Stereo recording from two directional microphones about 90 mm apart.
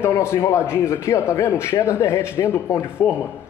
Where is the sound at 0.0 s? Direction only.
30° left (ahead or behind).